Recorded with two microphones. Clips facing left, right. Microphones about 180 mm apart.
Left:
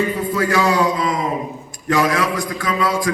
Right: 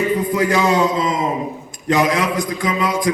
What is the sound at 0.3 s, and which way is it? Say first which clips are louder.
A man's voice: even; 20° right (ahead or behind).